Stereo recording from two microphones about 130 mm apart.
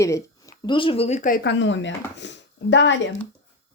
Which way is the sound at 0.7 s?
40° left (ahead or behind).